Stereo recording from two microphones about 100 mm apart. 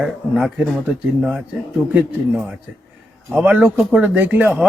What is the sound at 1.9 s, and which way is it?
Speech, 20° right (ahead or behind).